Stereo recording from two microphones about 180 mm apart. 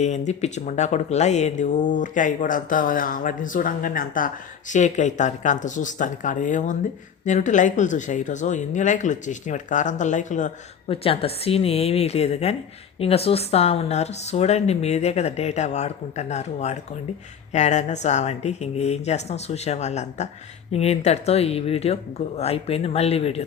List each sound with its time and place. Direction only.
0.0 s speech: 40° left (ahead or behind)
10.8 s speech: 30° left (ahead or behind)